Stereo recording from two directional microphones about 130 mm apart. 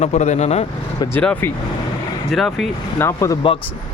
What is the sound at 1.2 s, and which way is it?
Speech, 10° left (ahead or behind).